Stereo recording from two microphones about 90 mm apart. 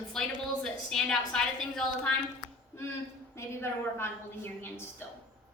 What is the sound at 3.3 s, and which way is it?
A woman's voice, 25° left (ahead or behind).